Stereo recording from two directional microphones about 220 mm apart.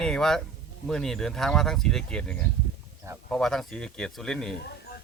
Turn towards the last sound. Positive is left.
turn(degrees=0)  # may be behind; listen again after turning